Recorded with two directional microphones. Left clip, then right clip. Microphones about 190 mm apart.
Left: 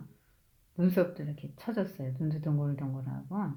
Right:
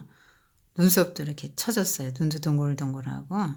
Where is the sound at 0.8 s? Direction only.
45° right (ahead or behind).